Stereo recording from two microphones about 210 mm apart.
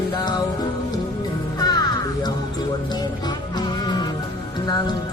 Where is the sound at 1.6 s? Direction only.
20° left (ahead or behind).